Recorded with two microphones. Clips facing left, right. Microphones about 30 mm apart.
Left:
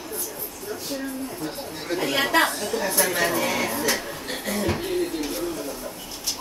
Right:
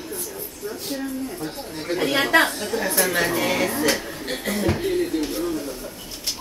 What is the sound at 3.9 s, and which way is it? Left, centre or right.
Speech, centre.